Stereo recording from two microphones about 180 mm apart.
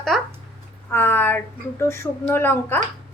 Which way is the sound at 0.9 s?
10° left (ahead or behind).